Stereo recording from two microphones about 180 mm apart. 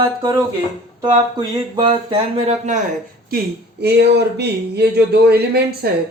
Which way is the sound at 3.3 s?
65° right (ahead or behind).